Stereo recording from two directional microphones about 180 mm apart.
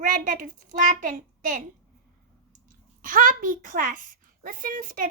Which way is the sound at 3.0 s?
50° right (ahead or behind).